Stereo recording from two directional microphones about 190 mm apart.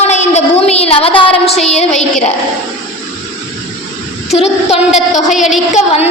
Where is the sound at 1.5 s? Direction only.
35° left (ahead or behind).